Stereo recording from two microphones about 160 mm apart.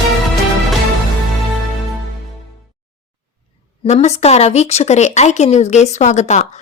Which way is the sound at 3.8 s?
45° left (ahead or behind).